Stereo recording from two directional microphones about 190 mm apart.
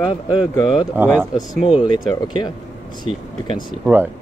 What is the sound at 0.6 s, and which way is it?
Speech, 20° left (ahead or behind).